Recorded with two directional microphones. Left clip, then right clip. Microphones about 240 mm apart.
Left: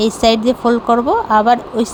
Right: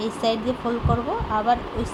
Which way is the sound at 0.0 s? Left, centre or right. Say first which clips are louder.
Left 11 dB; left.